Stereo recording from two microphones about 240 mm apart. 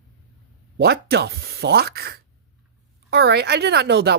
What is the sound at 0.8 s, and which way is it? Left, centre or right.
Speech, right.